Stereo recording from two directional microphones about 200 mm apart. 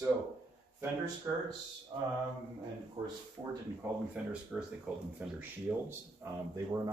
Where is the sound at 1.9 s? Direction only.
20° right (ahead or behind).